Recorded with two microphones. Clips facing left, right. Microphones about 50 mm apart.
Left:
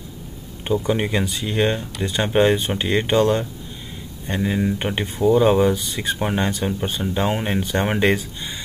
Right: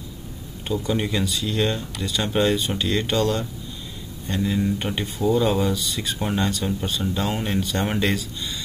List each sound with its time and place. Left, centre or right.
0.7 s speech: left